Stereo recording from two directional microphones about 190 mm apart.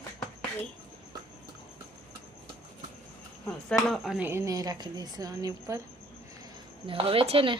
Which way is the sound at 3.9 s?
5° right (ahead or behind).